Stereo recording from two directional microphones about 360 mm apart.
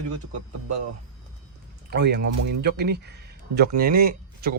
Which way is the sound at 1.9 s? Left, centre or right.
Right.